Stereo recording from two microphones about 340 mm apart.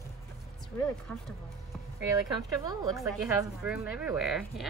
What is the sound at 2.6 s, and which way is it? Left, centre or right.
A woman's voice, centre.